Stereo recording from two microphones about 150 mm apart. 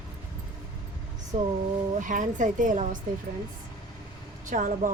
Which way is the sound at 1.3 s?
50° right (ahead or behind).